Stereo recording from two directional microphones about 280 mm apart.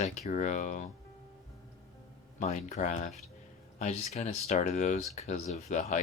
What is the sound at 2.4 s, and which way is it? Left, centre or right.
Speech, left.